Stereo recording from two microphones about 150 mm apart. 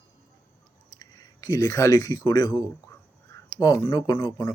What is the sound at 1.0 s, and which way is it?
Speech, 25° left (ahead or behind).